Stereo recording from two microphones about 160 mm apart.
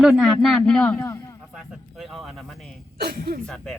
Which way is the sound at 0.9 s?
20° left (ahead or behind).